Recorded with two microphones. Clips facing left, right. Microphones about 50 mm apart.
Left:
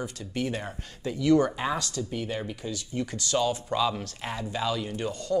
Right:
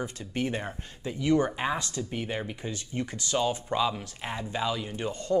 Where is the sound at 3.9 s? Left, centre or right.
Centre; by 5.4 s right.